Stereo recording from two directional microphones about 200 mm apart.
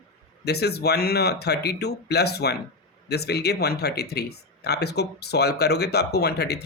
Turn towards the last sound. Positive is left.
turn(degrees=55)  # may be behind; listen again after turning